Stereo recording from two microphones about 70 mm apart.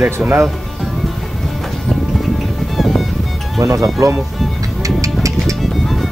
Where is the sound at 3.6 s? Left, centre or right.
Right.